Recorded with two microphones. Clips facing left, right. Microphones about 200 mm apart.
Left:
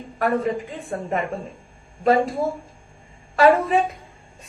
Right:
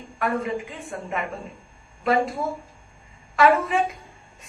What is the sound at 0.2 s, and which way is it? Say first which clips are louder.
Speech: left 4 dB; 40° left (ahead or behind).